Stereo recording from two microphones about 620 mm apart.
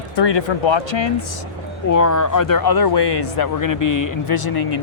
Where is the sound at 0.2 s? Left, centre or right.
Left.